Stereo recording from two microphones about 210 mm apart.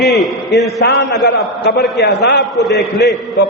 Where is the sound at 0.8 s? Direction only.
55° left (ahead or behind).